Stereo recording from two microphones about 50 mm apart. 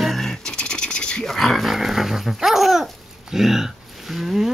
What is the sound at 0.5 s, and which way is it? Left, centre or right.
Scratch, centre.